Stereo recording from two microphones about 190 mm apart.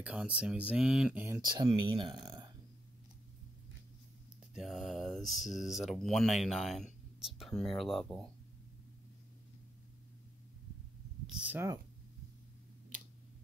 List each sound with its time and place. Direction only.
0.0 s speech: 5° right (ahead or behind)
1.4 s speech: 25° right (ahead or behind)
4.6 s speech: centre (ahead or behind)
11.2 s speech: 10° right (ahead or behind)